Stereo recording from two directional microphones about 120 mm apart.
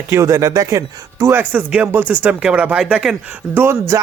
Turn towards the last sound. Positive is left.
turn(degrees=-20)  # may be behind; listen again after turning